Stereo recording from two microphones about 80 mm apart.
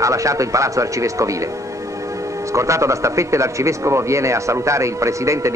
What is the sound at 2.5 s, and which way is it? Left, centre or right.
Speech, right.